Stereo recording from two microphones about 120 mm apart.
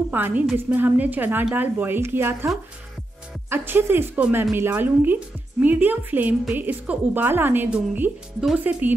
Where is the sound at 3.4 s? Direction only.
20° right (ahead or behind).